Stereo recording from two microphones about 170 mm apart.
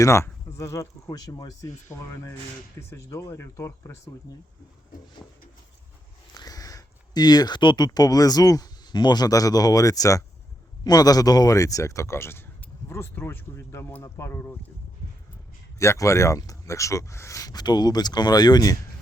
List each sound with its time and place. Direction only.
0.0 s speech: 15° left (ahead or behind)
6.3 s speech: 20° left (ahead or behind)
15.8 s speech: 15° left (ahead or behind)